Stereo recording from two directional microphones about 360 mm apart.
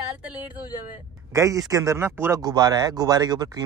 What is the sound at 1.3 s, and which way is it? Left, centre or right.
Speech, centre.